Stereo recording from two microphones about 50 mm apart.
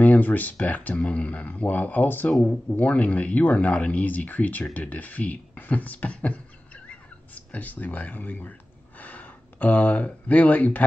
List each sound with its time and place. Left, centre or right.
0.0 s speech: left